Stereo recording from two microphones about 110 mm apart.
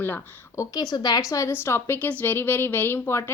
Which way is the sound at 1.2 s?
30° left (ahead or behind).